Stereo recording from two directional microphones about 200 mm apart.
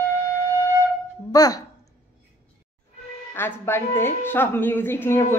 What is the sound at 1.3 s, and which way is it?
Speech, 20° left (ahead or behind).